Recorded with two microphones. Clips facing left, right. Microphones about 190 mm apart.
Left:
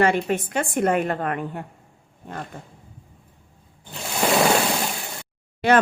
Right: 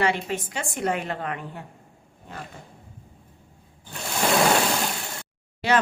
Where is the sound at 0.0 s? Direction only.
50° left (ahead or behind).